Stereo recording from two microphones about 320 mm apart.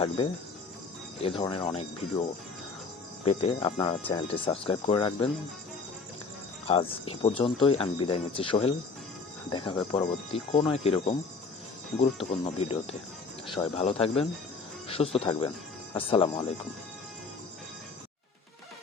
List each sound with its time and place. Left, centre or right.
1.2 s speech: centre
3.2 s speech: centre
6.7 s speech: centre
12.3 s speech: centre